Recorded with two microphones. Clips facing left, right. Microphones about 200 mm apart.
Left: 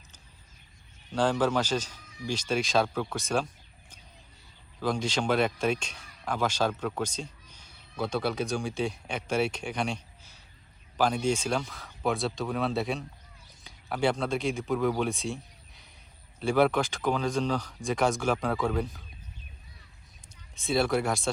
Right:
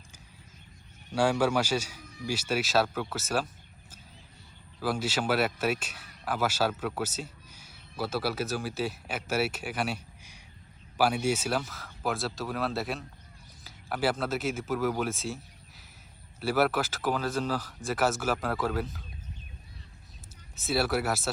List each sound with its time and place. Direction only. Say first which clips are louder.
1.1 s speech: even; 10° right (ahead or behind)
4.8 s speech: left 1 dB; 5° right (ahead or behind)
20.6 s speech: left 2 dB; 5° right (ahead or behind)